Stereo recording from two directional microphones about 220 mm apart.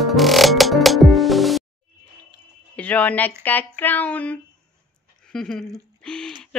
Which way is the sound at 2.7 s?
5° left (ahead or behind).